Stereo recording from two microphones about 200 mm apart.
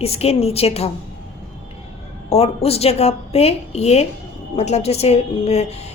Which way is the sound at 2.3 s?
30° left (ahead or behind).